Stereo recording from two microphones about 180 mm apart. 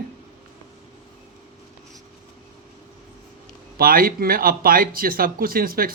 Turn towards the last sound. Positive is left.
turn(degrees=-55)  # may be behind; listen again after turning